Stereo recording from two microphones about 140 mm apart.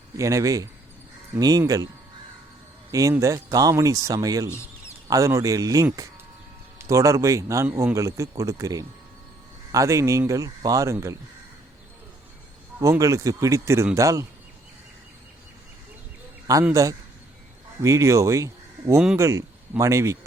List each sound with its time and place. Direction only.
0.2 s speech: 25° right (ahead or behind)
2.9 s speech: 20° right (ahead or behind)
12.8 s speech: 20° right (ahead or behind)
16.5 s speech: 25° right (ahead or behind)
17.7 s speech: 20° right (ahead or behind)